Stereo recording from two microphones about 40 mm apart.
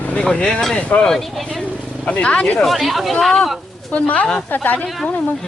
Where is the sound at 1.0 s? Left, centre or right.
Centre.